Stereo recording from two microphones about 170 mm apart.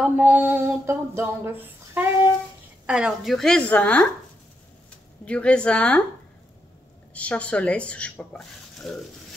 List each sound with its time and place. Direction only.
0.0 s a sound: 10° right (ahead or behind)
2.9 s a woman's voice: 5° right (ahead or behind)
5.2 s speech: 5° left (ahead or behind)
7.2 s speech: 5° left (ahead or behind)